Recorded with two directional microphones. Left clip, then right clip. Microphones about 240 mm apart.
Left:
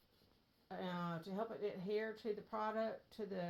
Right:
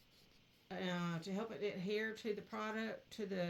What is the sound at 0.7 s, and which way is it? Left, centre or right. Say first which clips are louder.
Speech: right 2 dB; right.